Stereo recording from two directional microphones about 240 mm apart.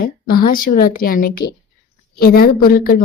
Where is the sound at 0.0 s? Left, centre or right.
Left.